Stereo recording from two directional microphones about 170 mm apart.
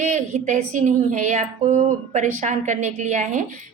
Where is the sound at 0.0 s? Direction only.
45° right (ahead or behind).